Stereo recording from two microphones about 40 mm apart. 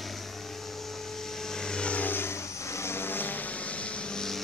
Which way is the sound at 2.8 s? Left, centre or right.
Left.